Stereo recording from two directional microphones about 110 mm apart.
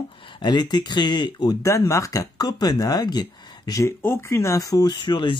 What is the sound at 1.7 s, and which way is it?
Speech, 30° left (ahead or behind).